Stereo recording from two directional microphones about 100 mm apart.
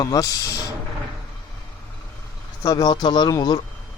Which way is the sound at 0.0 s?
35° left (ahead or behind).